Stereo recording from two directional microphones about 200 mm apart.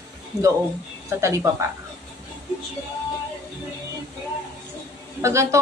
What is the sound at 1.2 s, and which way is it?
Speech, 15° right (ahead or behind).